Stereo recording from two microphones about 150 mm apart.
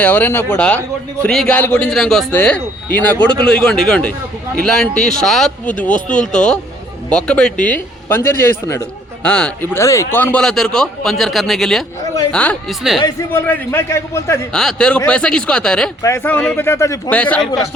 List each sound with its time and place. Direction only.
0.0 s a man's voice: 10° left (ahead or behind)
9.7 s a man's voice: 20° left (ahead or behind)
13.0 s a man's voice: 25° left (ahead or behind)
13.3 s a man's voice: 15° left (ahead or behind)
14.5 s a man's voice: 5° left (ahead or behind)
16.0 s a man's voice: 15° left (ahead or behind)
17.1 s a man's voice: 10° left (ahead or behind)